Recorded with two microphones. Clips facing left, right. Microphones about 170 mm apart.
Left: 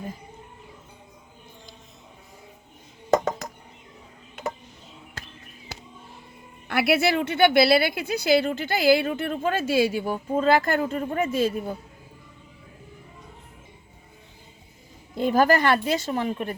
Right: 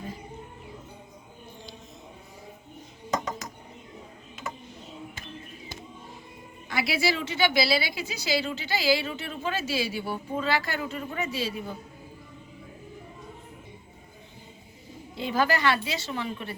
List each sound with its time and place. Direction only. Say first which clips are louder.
6.7 s a woman's voice: left 6 dB; 60° left (ahead or behind)
15.1 s a woman's voice: left 6 dB; 50° left (ahead or behind)